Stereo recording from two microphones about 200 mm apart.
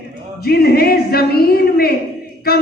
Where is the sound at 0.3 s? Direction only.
50° left (ahead or behind).